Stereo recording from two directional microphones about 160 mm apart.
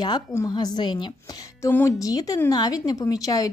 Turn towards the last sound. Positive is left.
turn(degrees=20)  # may be behind; listen again after turning